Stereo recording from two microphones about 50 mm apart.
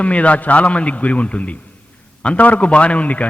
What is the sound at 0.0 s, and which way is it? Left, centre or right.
A man's voice, left.